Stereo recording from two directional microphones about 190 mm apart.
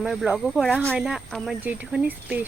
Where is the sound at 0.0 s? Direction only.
5° right (ahead or behind).